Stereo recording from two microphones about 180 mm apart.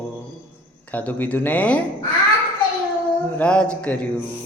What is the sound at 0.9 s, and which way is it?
Speech, 10° left (ahead or behind).